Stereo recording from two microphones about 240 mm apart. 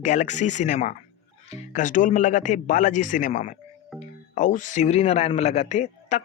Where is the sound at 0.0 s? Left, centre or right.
Left.